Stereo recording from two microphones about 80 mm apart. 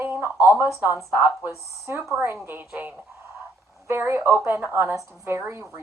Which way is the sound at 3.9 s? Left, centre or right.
Right.